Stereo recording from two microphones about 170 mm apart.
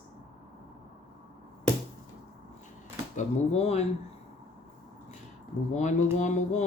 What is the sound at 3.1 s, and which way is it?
Speech, 40° left (ahead or behind).